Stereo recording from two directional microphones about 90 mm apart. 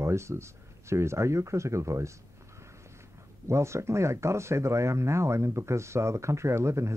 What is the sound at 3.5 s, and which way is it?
Speech, 30° right (ahead or behind).